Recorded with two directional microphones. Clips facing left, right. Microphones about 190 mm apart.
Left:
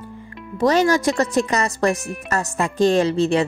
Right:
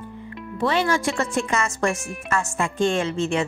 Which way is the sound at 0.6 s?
40° left (ahead or behind).